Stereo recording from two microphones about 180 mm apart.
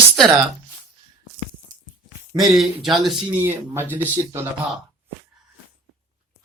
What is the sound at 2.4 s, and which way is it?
Speech, centre (ahead or behind).